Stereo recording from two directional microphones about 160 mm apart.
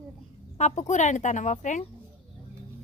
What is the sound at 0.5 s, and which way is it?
Speech, 45° left (ahead or behind).